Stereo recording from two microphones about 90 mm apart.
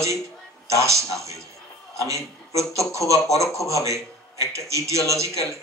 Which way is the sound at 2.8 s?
35° right (ahead or behind).